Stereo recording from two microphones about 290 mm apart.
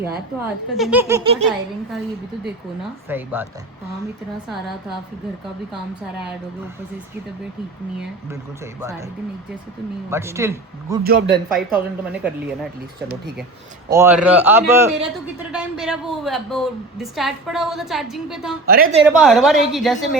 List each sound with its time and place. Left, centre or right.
0.4 s a man's voice: centre
3.1 s a man's voice: centre
10.1 s a man's voice: centre
11.0 s a woman's voice: right
11.5 s a woman's voice: centre
13.9 s a man's voice: centre
18.6 s a woman's voice: right
19.0 s a woman's voice: centre